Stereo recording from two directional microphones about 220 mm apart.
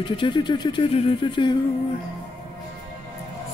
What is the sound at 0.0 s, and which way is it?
Speech, 20° left (ahead or behind).